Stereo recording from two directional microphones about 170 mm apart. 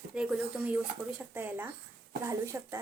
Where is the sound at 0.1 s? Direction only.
5° right (ahead or behind).